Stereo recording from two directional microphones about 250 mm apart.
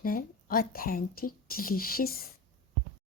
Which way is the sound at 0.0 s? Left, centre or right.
Left.